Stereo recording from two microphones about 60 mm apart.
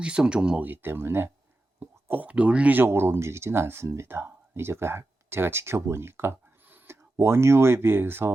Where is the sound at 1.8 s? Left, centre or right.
Right.